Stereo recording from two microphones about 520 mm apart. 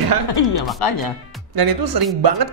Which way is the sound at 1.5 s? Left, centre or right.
Right.